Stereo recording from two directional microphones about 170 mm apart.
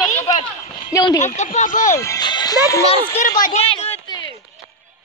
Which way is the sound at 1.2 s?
45° left (ahead or behind).